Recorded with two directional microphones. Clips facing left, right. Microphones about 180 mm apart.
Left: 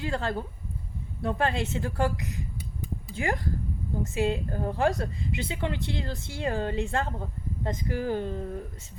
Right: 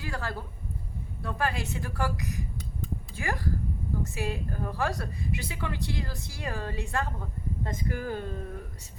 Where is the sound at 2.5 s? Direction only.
10° left (ahead or behind).